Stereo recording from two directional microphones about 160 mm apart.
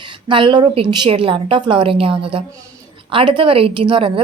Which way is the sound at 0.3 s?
30° right (ahead or behind).